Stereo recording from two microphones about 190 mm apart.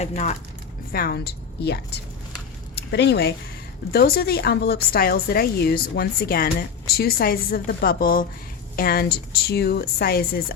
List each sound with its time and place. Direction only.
0.0 s speech: 35° left (ahead or behind)
0.9 s a woman's voice: 55° left (ahead or behind)